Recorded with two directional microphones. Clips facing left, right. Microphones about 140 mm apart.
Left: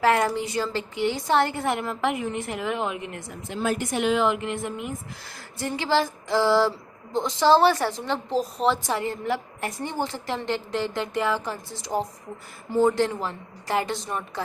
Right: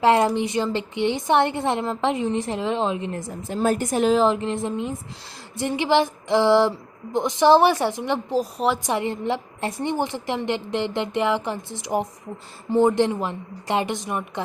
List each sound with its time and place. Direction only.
0.0 s a woman's voice: 25° right (ahead or behind)
3.2 s a woman's voice: 40° right (ahead or behind); by 8.8 s 10° right (ahead or behind)
8.9 s a woman's voice: 25° right (ahead or behind)